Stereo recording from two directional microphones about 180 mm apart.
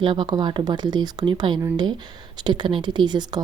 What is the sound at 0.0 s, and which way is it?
Speech, 25° right (ahead or behind).